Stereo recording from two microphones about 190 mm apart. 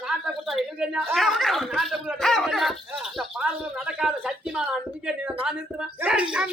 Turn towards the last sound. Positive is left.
turn(degrees=-5)  # may be behind; listen again after turning